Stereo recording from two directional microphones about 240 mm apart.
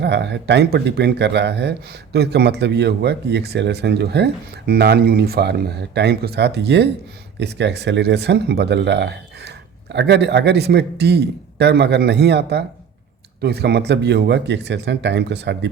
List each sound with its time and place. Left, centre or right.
0.0 s speech: right